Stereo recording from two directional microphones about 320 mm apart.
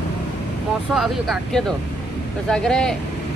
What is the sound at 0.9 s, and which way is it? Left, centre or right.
Speech, centre.